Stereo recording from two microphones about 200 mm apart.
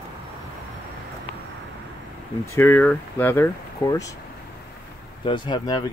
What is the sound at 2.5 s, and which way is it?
Speech, 10° left (ahead or behind).